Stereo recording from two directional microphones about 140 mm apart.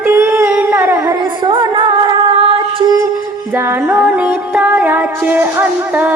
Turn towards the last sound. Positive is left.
turn(degrees=-15)  # may be behind; listen again after turning